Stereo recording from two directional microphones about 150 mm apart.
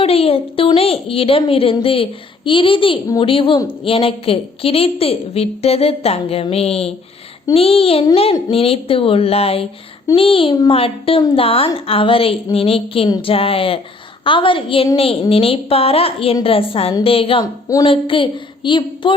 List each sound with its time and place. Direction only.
0.0 s a woman's voice: 40° left (ahead or behind)